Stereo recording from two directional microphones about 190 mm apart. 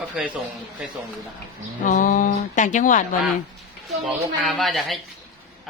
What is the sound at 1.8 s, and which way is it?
Speech, 45° left (ahead or behind).